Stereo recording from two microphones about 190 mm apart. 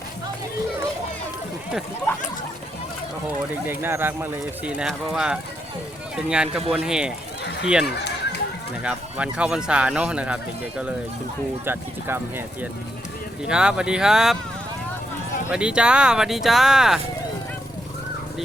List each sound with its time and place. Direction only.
3.7 s speech: 10° right (ahead or behind)
7.9 s a sound: 60° left (ahead or behind)
8.8 s speech: 5° right (ahead or behind)
13.5 s speech: 5° right (ahead or behind)
15.4 s speech: 5° right (ahead or behind)